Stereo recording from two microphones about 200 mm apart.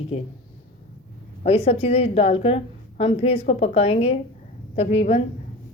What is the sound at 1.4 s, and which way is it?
A woman's voice, 30° left (ahead or behind).